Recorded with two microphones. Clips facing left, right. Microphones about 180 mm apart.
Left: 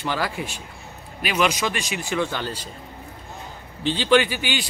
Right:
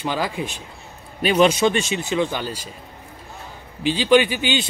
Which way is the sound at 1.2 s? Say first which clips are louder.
Right 7 dB; 30° right (ahead or behind).